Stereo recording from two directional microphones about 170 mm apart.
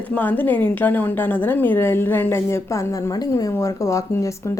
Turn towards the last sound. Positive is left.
turn(degrees=20)  # may be behind; listen again after turning